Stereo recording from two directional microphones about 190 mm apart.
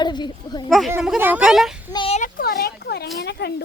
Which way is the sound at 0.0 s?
25° left (ahead or behind).